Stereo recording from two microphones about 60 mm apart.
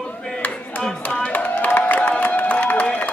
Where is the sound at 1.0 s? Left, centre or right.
Left.